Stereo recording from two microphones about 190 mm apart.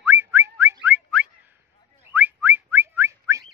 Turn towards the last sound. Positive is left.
turn(degrees=-15)  # may be behind; listen again after turning